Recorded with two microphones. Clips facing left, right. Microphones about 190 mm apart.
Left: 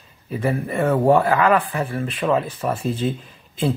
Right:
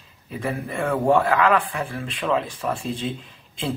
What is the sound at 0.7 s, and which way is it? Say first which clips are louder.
Speech: left 4 dB; 25° left (ahead or behind).